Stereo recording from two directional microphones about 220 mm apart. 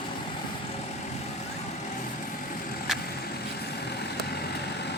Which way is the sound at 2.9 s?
Centre (ahead or behind).